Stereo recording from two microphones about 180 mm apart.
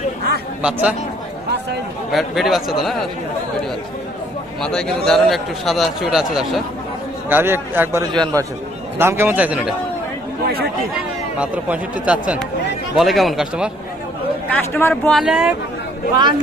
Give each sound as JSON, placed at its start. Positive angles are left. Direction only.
{"t": 0.6, "sound": "speech", "side_deg": -5}
{"t": 2.1, "sound": "a man's voice", "side_deg": 0}
{"t": 4.6, "sound": "a man's voice", "side_deg": 5}
{"t": 7.3, "sound": "a man's voice", "side_deg": -10}
{"t": 10.4, "sound": "speech", "side_deg": -60}
{"t": 11.3, "sound": "a man's voice", "side_deg": -5}
{"t": 14.5, "sound": "speech", "side_deg": 10}
{"t": 15.1, "sound": "a man's voice", "side_deg": -5}